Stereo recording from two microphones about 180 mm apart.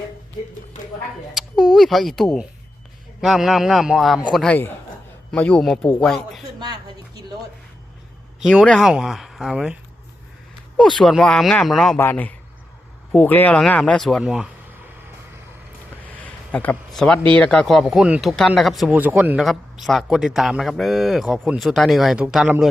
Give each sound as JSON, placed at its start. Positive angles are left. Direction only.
{"t": 0.7, "sound": "speech", "side_deg": 45}
{"t": 1.3, "sound": "a man's voice", "side_deg": 0}
{"t": 6.6, "sound": "a sound", "side_deg": -25}
{"t": 8.4, "sound": "speech", "side_deg": -5}
{"t": 10.8, "sound": "a man's voice", "side_deg": 0}
{"t": 16.1, "sound": "a sound", "side_deg": 10}
{"t": 17.3, "sound": "speech", "side_deg": 5}